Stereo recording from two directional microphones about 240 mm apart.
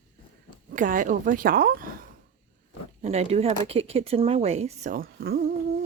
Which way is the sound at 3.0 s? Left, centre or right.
Right.